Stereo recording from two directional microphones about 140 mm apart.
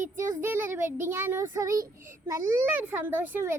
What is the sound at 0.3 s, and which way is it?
A child's voice, 15° right (ahead or behind).